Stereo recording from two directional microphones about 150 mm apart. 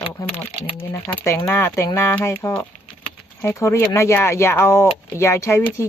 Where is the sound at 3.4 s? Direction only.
20° left (ahead or behind).